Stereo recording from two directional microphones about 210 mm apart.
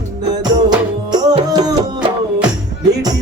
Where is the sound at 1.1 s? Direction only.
20° right (ahead or behind).